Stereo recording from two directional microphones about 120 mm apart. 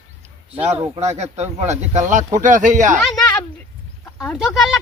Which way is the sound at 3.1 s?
10° left (ahead or behind).